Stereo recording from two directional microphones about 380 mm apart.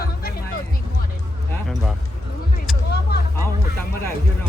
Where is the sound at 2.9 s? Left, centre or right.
Left.